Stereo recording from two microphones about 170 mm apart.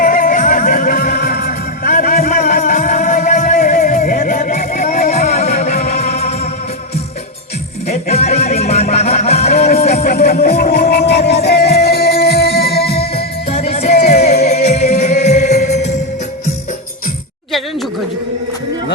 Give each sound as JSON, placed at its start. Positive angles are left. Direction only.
{"t": 0.0, "sound": "music", "side_deg": 55}
{"t": 7.9, "sound": "music", "side_deg": 40}
{"t": 10.0, "sound": "music", "side_deg": 70}
{"t": 13.5, "sound": "music", "side_deg": 35}